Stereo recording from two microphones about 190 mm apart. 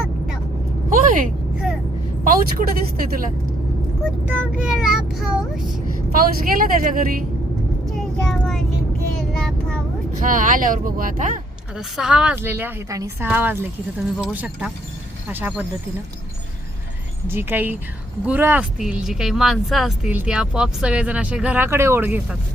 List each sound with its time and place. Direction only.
0.9 s vehicle: 45° right (ahead or behind)
2.2 s speech: 45° right (ahead or behind)
4.0 s speech: 5° right (ahead or behind)
6.1 s speech: 50° right (ahead or behind)
7.9 s child singing: 5° left (ahead or behind)
9.3 s vehicle: centre (ahead or behind)
10.2 s speech: 45° right (ahead or behind)
11.8 s speech: 5° right (ahead or behind)
17.2 s speech: 10° right (ahead or behind)